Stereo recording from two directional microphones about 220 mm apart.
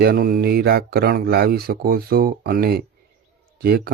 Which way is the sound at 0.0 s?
45° right (ahead or behind).